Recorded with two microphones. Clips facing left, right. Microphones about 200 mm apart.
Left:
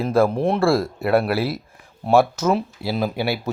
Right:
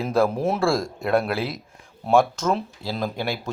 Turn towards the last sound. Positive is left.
turn(degrees=5)  # may be behind; listen again after turning